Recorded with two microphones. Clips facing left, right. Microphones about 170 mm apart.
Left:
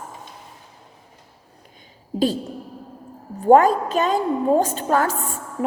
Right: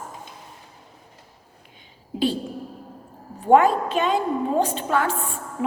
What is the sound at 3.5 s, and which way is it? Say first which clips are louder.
A woman's voice: left 2 dB; 40° left (ahead or behind).